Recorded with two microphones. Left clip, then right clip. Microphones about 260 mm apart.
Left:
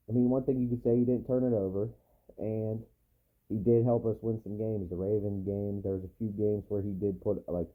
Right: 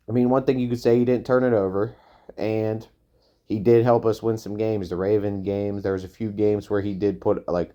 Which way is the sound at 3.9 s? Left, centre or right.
Right.